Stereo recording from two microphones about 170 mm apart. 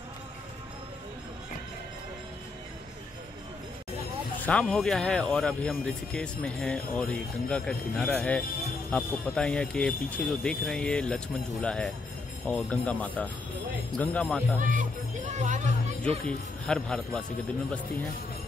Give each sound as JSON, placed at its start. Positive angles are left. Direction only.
{"t": 4.4, "sound": "speech", "side_deg": 5}
{"t": 14.6, "sound": "music", "side_deg": -50}
{"t": 16.3, "sound": "speech", "side_deg": 5}